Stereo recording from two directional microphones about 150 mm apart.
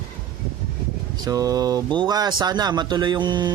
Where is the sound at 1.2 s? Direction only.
25° right (ahead or behind).